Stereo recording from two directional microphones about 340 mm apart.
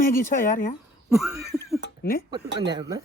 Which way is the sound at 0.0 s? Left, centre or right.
Left.